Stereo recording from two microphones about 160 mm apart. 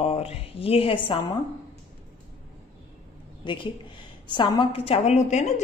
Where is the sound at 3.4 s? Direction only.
30° left (ahead or behind); by 5.6 s 45° left (ahead or behind).